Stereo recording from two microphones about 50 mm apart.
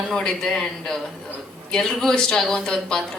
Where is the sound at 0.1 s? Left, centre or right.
Centre.